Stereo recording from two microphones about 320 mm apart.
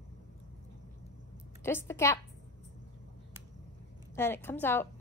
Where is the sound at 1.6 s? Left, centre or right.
Centre.